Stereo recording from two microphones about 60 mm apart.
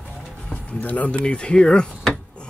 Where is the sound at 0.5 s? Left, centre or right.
Left.